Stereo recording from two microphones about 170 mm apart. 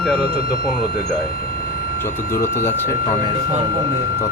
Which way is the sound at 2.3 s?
15° left (ahead or behind).